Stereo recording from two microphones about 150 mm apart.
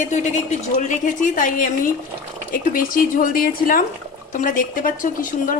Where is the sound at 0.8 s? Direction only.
60° left (ahead or behind).